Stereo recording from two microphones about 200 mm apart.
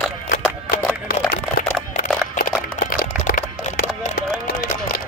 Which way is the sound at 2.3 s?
45° left (ahead or behind).